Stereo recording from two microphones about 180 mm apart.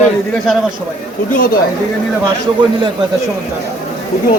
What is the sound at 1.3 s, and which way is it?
Speech, 50° left (ahead or behind).